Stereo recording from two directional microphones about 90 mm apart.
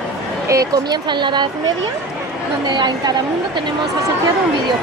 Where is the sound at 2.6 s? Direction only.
55° right (ahead or behind).